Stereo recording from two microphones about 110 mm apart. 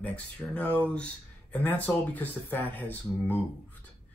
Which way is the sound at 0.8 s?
10° left (ahead or behind).